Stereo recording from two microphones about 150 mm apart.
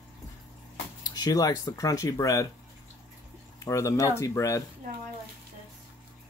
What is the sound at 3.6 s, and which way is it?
Speech, 20° left (ahead or behind).